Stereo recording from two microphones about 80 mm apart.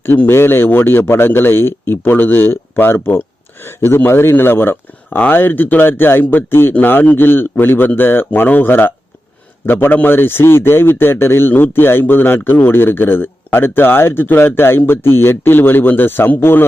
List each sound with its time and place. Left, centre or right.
0.0 s a man's voice: left